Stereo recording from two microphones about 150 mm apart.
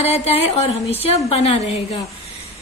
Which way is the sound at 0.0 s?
40° left (ahead or behind).